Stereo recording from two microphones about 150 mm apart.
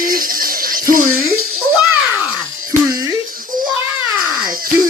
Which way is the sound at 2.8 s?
25° right (ahead or behind).